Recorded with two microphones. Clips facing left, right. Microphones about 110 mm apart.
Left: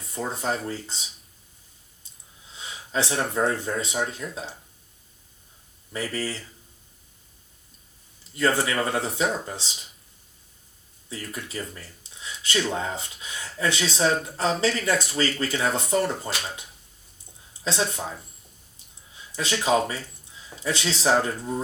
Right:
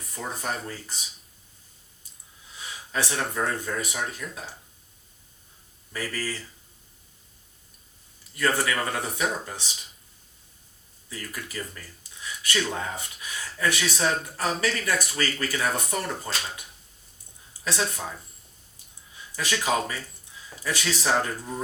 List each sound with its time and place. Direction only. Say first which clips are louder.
0.1 s speech: left 4 dB; 25° left (ahead or behind)
2.5 s speech: left 2 dB; 25° left (ahead or behind)
5.9 s speech: left 2 dB; 25° left (ahead or behind)
8.4 s speech: left 2 dB; 25° left (ahead or behind)
11.1 s speech: left 2 dB; 25° left (ahead or behind)
19.4 s speech: left 3 dB; 25° left (ahead or behind)